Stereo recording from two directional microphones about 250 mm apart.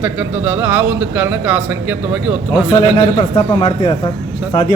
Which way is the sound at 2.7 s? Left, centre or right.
Left.